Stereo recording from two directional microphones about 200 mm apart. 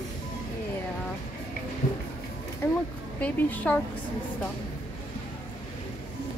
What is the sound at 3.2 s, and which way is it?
Speech, 5° left (ahead or behind).